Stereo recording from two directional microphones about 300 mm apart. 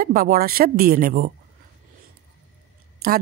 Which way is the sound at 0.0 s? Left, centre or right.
Right.